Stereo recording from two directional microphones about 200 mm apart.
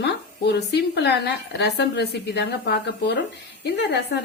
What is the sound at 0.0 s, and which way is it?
A woman's voice, 55° left (ahead or behind).